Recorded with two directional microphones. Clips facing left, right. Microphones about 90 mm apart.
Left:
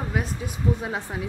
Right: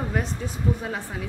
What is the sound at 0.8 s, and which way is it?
Speech, 20° left (ahead or behind).